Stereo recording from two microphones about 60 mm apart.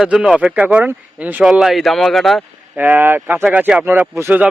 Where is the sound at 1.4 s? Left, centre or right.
Centre.